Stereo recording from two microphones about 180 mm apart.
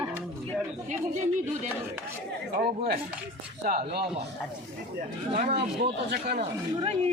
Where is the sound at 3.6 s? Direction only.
55° right (ahead or behind).